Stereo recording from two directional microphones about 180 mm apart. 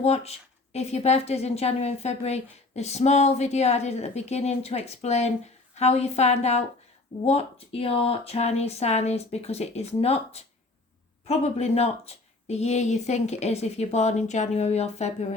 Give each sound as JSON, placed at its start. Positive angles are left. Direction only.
{"t": 0.0, "sound": "a woman's voice", "side_deg": 35}